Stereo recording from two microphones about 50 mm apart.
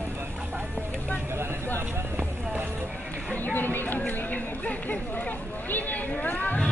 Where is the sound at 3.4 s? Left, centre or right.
Left.